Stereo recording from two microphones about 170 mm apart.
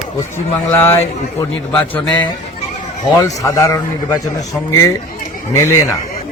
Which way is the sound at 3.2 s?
20° left (ahead or behind).